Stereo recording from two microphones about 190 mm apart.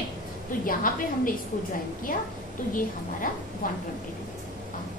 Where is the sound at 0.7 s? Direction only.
45° left (ahead or behind).